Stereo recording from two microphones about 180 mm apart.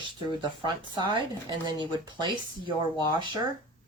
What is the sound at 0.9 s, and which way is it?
Speech, 25° right (ahead or behind).